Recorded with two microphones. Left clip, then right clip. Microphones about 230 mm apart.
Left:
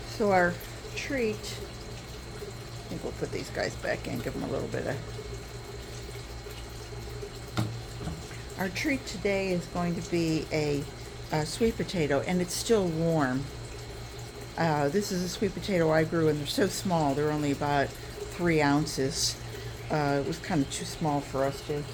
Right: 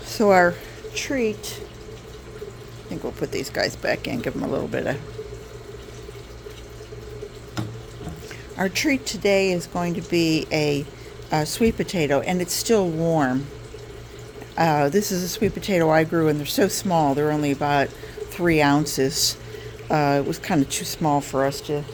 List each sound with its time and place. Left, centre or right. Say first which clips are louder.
0.1 s speech: right 8 dB; right
3.2 s speech: right 9 dB; right
8.5 s speech: right 8 dB; right
14.5 s speech: right 8 dB; right